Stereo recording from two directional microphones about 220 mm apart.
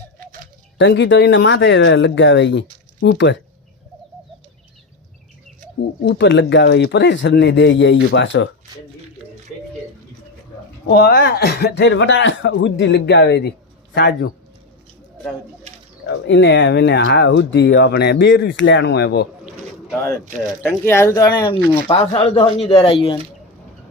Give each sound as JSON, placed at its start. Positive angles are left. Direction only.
{"t": 0.8, "sound": "speech", "side_deg": 55}
{"t": 6.1, "sound": "speech", "side_deg": 55}
{"t": 10.8, "sound": "speech", "side_deg": 50}
{"t": 16.0, "sound": "speech", "side_deg": 55}
{"t": 20.6, "sound": "speech", "side_deg": 10}